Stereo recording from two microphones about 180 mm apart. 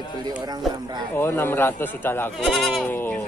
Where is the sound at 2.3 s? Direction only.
Centre (ahead or behind).